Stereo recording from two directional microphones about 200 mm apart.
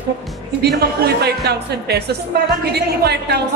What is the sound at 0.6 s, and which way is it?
A woman's voice, 55° right (ahead or behind).